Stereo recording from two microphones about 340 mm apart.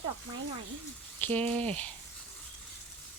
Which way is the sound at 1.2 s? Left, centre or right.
Centre.